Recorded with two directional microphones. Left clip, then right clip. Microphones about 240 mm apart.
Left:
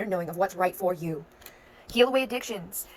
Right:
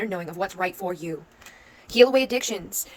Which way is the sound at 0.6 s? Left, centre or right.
Right.